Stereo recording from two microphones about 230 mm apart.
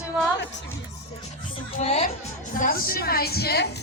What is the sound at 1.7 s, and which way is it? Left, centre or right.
Speech, left.